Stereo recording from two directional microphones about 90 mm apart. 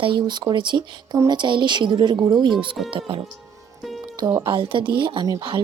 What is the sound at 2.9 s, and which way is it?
Speech, 75° right (ahead or behind).